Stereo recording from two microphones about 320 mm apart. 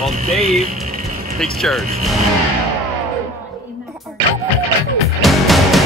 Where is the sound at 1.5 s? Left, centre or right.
Centre.